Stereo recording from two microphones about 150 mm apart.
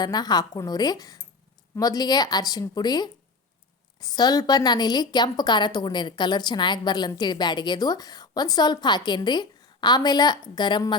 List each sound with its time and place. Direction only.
0.0 s a woman's voice: 25° left (ahead or behind)